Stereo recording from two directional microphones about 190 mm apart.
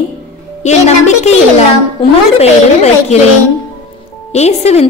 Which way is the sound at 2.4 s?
35° left (ahead or behind).